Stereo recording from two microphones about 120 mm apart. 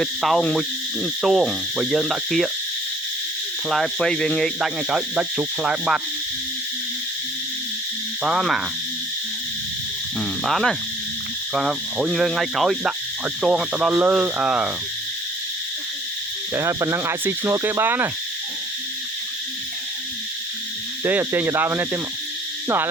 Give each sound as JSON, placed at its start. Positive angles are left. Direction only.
{"t": 0.0, "sound": "speech", "side_deg": 0}
{"t": 3.7, "sound": "speech", "side_deg": 5}
{"t": 4.9, "sound": "speech", "side_deg": -5}
{"t": 8.2, "sound": "speech", "side_deg": -5}
{"t": 10.2, "sound": "speech", "side_deg": 0}
{"t": 16.6, "sound": "speech", "side_deg": -20}
{"t": 21.0, "sound": "speech", "side_deg": -15}